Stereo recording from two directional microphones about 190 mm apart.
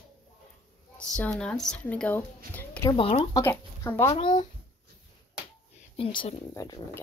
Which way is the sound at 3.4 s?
10° left (ahead or behind).